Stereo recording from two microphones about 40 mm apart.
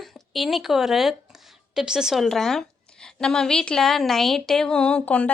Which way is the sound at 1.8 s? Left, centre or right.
Centre.